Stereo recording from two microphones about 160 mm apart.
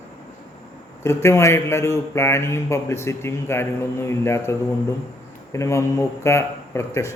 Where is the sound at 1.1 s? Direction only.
15° left (ahead or behind).